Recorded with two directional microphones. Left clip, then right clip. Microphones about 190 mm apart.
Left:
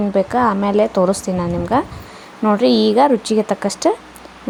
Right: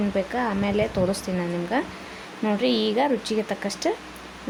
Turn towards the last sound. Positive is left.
turn(degrees=25)  # may be behind; listen again after turning